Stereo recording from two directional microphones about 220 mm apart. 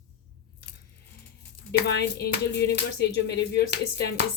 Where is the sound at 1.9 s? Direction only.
50° left (ahead or behind).